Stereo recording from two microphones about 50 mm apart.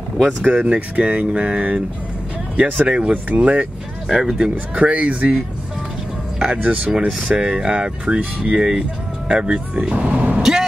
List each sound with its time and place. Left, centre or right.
0.4 s speech: right
4.1 s speech: centre
4.4 s speech: right
6.5 s speech: right
7.3 s speech: centre
10.0 s vehicle: right